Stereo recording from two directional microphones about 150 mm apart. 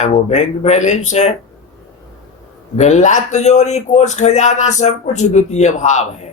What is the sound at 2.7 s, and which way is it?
A man's voice, 50° left (ahead or behind).